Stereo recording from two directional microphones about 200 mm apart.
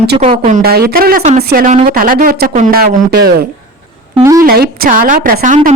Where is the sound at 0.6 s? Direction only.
50° right (ahead or behind).